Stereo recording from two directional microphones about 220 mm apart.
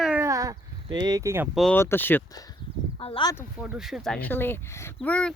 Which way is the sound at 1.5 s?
Centre (ahead or behind).